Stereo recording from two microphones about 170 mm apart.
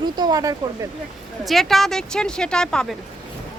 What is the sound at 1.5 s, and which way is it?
A woman's voice, centre (ahead or behind).